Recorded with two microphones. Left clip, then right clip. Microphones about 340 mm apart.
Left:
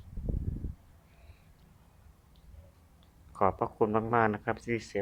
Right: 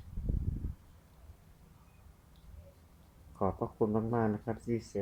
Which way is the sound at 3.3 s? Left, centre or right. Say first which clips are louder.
Left 6 dB; left.